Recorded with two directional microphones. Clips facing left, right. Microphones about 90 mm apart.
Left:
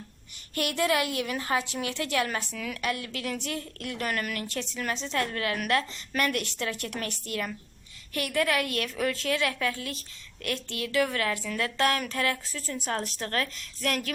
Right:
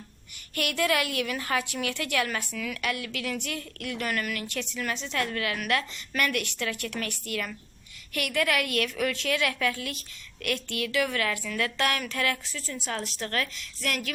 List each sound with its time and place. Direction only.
0.5 s a woman's voice: 30° left (ahead or behind)
12.5 s speech: 45° left (ahead or behind)